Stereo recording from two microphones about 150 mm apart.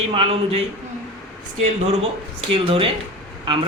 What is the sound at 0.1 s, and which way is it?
Speech, 40° right (ahead or behind).